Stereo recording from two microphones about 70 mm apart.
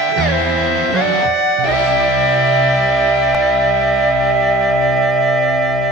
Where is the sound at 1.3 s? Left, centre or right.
Centre.